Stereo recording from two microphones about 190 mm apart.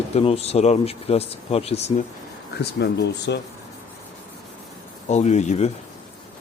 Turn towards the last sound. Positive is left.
turn(degrees=35)  # may be behind; listen again after turning